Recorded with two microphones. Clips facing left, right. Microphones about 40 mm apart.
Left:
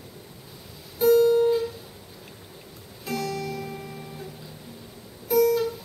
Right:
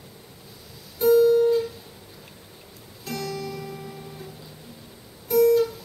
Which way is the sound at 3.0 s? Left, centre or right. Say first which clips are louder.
Left 2 dB; centre.